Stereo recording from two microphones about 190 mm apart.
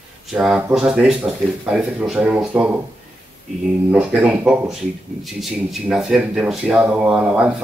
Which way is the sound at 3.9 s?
5° right (ahead or behind).